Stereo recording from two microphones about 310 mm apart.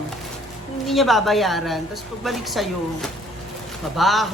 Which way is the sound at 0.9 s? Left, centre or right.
Centre.